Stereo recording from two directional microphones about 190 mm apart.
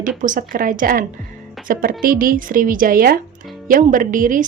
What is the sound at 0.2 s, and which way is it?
A woman's voice, 45° right (ahead or behind).